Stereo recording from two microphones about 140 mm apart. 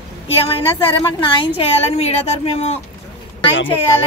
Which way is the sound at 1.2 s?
40° left (ahead or behind).